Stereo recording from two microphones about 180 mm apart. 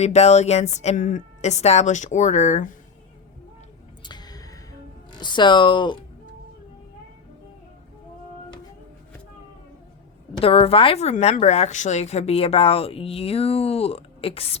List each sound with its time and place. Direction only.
0.0 s a woman's voice: 40° left (ahead or behind)
4.0 s music: 25° left (ahead or behind)
5.1 s speech: 25° left (ahead or behind)
10.4 s a woman's voice: 30° left (ahead or behind)